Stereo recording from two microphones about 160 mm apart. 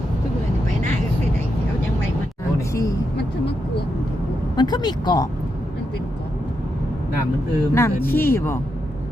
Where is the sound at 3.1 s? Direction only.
90° left.